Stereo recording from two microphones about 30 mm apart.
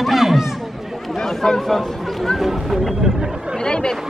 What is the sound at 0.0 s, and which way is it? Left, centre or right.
Chatter, centre.